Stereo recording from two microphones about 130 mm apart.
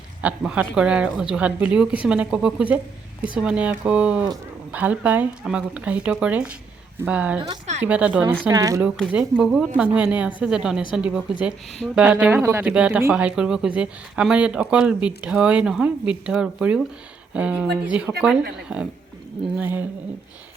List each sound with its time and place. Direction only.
0.2 s speech: 10° right (ahead or behind)
8.4 s speech: 25° right (ahead or behind)
9.0 s speech: 10° right (ahead or behind)
12.3 s speech: 20° right (ahead or behind)
12.7 s speech: 10° right (ahead or behind)